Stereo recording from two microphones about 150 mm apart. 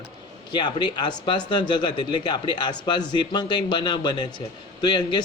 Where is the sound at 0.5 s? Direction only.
30° left (ahead or behind).